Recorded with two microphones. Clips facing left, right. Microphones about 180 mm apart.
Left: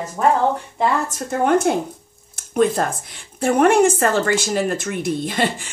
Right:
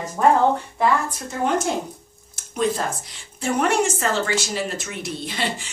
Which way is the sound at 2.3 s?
55° left (ahead or behind).